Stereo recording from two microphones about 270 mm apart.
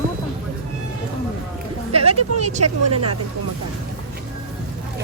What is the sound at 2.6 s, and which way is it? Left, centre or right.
Speech, right.